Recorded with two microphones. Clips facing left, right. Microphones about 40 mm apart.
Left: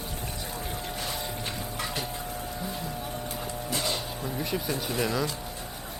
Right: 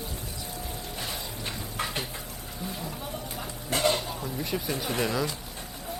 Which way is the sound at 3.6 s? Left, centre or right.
Right.